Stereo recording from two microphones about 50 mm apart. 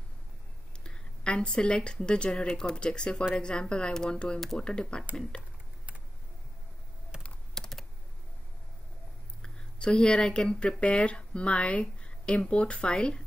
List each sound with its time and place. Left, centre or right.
0.8 s a sound: centre
1.9 s speech: centre
7.5 s computer keyboard: centre
9.4 s speech: centre